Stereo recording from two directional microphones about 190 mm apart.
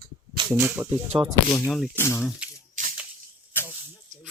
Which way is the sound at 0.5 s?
10° right (ahead or behind).